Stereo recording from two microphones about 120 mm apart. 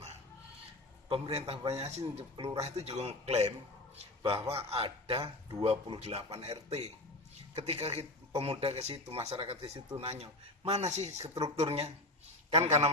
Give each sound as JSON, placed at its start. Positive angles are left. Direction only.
{"t": 1.0, "sound": "speech", "side_deg": -50}